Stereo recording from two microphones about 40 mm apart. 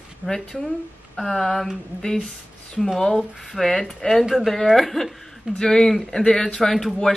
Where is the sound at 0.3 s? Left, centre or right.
Centre.